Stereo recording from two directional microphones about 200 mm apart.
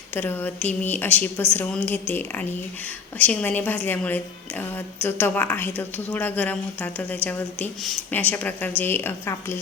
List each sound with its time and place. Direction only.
0.1 s a woman's voice: 10° left (ahead or behind)